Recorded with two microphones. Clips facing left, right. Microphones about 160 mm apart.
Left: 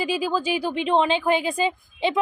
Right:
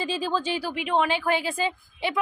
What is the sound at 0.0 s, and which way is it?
Speech, 10° left (ahead or behind).